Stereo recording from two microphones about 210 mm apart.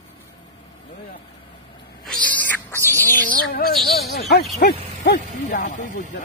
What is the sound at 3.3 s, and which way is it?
Bleat, 45° left (ahead or behind).